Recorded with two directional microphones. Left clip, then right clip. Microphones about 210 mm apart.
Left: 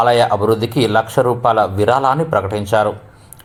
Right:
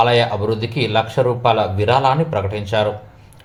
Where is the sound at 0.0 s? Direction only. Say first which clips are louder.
Left 3 dB; 30° left (ahead or behind).